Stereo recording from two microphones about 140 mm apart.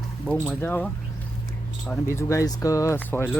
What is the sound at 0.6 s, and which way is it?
Speech, 10° left (ahead or behind).